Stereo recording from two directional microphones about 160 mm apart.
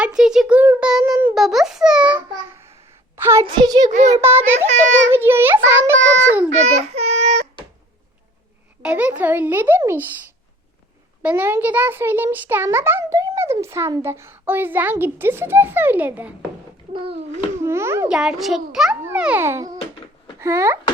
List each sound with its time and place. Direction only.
0.0 s a child's voice: 5° right (ahead or behind)
1.4 s a child's voice: centre (ahead or behind); by 3.8 s 25° right (ahead or behind)
3.8 s a child's voice: 45° right (ahead or behind)
4.2 s a child's voice: 15° right (ahead or behind)
4.5 s a child's voice: 45° right (ahead or behind)
5.1 s a child's voice: 15° right (ahead or behind)
6.5 s a child's voice: 45° right (ahead or behind)
8.8 s a child's voice: 10° right (ahead or behind)
11.2 s a child's voice: 10° right (ahead or behind)
17.6 s a child's voice: 15° right (ahead or behind)
18.1 s a child's voice: centre (ahead or behind)